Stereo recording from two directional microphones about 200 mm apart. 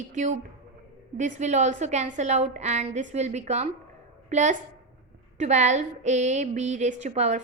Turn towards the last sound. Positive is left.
turn(degrees=-35)  # may be behind; listen again after turning